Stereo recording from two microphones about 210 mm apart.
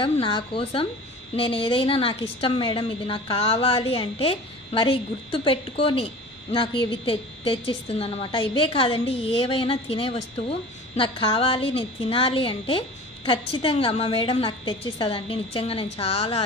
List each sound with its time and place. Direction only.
0.0 s a woman's voice: 25° left (ahead or behind)